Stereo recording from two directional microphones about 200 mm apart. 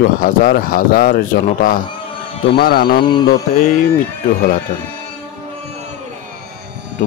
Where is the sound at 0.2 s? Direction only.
45° left (ahead or behind).